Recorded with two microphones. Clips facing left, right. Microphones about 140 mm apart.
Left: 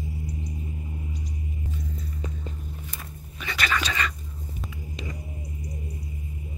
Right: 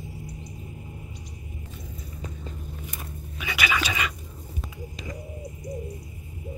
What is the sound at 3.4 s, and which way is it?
Whispering, 10° right (ahead or behind).